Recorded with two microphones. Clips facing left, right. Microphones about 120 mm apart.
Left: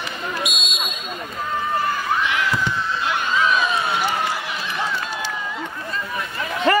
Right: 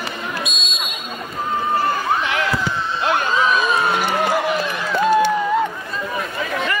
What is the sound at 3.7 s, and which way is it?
Run, 45° right (ahead or behind).